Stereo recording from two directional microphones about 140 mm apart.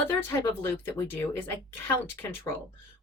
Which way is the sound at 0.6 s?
15° left (ahead or behind).